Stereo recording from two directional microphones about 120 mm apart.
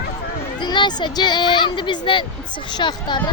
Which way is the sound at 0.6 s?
40° left (ahead or behind).